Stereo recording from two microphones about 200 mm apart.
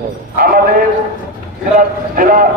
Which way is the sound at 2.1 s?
40° right (ahead or behind).